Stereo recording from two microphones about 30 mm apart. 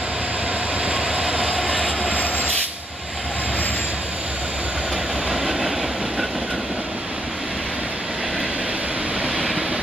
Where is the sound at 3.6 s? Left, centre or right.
Left.